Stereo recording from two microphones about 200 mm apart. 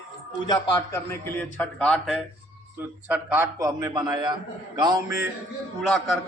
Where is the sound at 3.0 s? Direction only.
10° right (ahead or behind).